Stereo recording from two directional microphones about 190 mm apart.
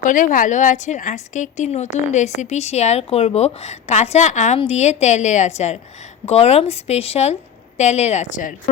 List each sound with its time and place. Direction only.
0.0 s a woman's voice: 45° left (ahead or behind)